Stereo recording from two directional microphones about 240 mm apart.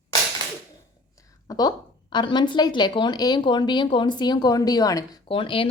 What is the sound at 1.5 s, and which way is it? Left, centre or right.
Speech, centre.